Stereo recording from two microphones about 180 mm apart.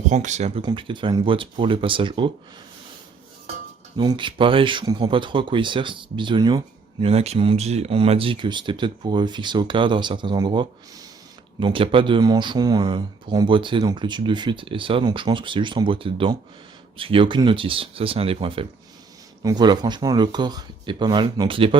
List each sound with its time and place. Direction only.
0.1 s speech: 40° right (ahead or behind)
0.6 s speech: 30° right (ahead or behind)
3.9 s speech: 25° right (ahead or behind)